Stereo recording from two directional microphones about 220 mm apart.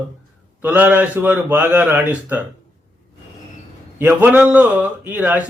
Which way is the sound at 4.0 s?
10° right (ahead or behind).